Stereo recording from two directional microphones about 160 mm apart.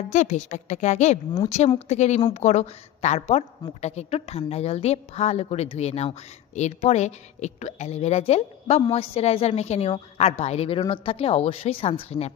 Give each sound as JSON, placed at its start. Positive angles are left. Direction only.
{"t": 0.1, "sound": "a woman's voice", "side_deg": 50}